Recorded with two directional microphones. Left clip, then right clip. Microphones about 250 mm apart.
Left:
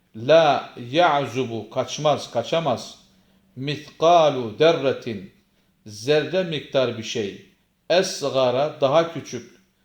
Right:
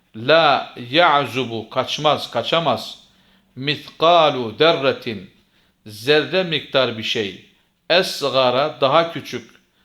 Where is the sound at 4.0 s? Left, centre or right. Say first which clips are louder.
Right 2 dB; centre.